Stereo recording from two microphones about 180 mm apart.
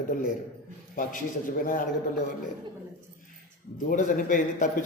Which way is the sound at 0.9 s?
50° left (ahead or behind).